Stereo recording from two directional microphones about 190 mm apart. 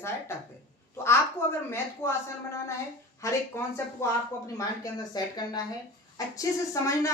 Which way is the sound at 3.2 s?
15° left (ahead or behind).